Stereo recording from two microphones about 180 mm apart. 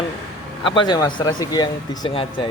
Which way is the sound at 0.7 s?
25° left (ahead or behind).